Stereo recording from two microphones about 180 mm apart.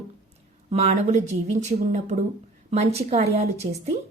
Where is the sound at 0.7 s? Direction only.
35° right (ahead or behind).